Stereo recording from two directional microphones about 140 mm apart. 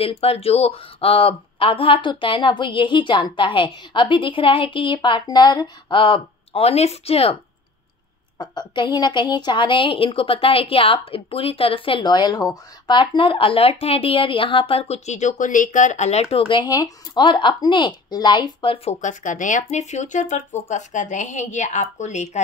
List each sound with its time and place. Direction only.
0.0 s a woman's voice: 45° left (ahead or behind)
8.4 s a woman's voice: 30° left (ahead or behind)
18.9 s speech: 70° left (ahead or behind)